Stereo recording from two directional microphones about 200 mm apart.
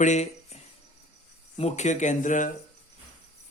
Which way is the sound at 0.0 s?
35° left (ahead or behind).